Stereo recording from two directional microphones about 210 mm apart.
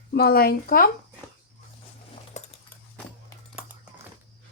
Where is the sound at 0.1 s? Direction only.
45° left (ahead or behind).